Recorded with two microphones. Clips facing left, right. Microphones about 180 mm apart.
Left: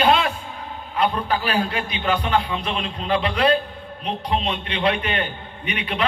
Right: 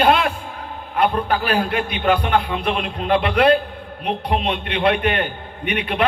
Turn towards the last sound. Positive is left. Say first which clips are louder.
# right 4 dB
turn(degrees=-60)  # may be behind; listen again after turning